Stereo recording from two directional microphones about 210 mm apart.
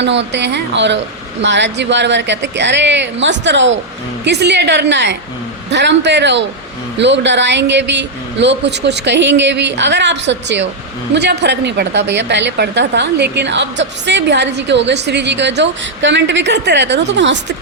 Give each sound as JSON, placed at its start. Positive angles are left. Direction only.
{"t": 0.0, "sound": "a woman's voice", "side_deg": -55}